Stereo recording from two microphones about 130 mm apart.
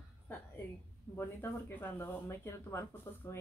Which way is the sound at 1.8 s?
20° left (ahead or behind).